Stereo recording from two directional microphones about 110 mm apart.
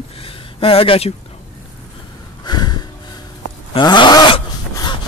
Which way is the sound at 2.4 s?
40° left (ahead or behind).